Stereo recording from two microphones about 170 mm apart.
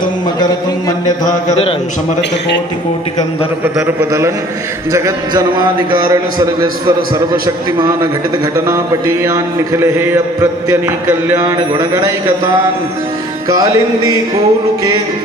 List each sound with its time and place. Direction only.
3.6 s mantra: 15° right (ahead or behind)
4.9 s a man's voice: 20° right (ahead or behind)
8.6 s mantra: 20° right (ahead or behind)
13.5 s a man's voice: 20° right (ahead or behind)